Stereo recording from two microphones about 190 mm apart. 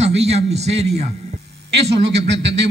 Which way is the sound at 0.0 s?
35° right (ahead or behind).